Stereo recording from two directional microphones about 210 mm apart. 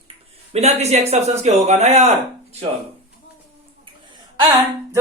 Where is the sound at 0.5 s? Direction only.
30° right (ahead or behind).